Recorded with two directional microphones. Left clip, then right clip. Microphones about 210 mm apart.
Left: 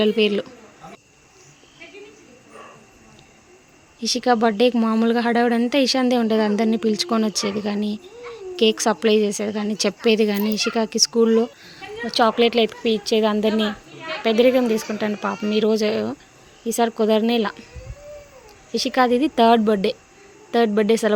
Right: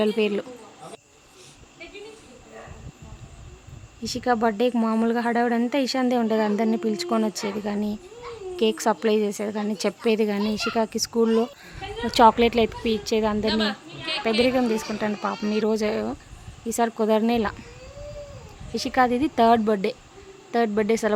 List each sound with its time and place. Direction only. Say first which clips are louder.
0.0 s a woman's voice: left 4 dB; 5° left (ahead or behind)
4.0 s a woman's voice: left 4 dB; 5° left (ahead or behind)
13.5 s a child's voice: left 2 dB; 15° right (ahead or behind)
14.3 s a woman's voice: left 6 dB; 5° left (ahead or behind)
18.7 s a woman's voice: left 3 dB; 5° left (ahead or behind)